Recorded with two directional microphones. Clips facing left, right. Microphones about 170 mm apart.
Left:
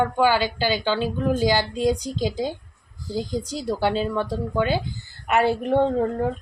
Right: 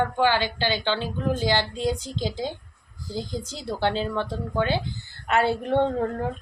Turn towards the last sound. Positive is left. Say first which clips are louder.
# left 3 dB
turn(degrees=0)  # may be behind; listen again after turning